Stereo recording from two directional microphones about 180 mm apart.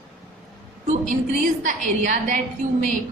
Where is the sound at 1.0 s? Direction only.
45° right (ahead or behind).